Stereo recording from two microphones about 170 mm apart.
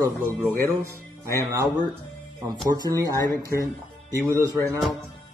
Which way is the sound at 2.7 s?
20° right (ahead or behind).